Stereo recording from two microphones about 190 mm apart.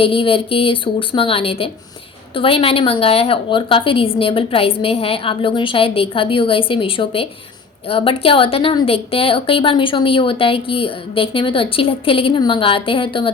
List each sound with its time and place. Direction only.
0.0 s a woman's voice: 30° left (ahead or behind)